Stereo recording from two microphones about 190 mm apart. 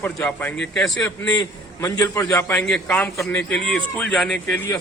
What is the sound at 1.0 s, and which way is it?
A man's voice, 20° left (ahead or behind).